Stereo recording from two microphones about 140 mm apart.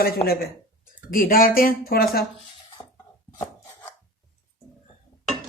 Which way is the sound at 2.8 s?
30° left (ahead or behind).